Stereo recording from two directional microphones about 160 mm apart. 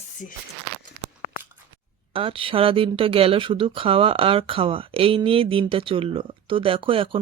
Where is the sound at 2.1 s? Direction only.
35° right (ahead or behind).